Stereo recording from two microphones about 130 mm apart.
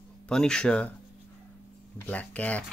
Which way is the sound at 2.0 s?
10° left (ahead or behind).